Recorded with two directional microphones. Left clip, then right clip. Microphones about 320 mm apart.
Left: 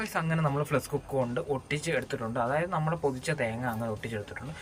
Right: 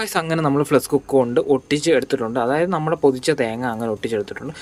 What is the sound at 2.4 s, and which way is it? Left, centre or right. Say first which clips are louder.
Speech: right 8 dB; centre.